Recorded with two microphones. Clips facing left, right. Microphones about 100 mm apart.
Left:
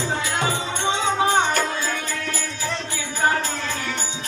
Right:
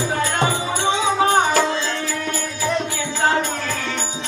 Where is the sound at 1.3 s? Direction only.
5° right (ahead or behind).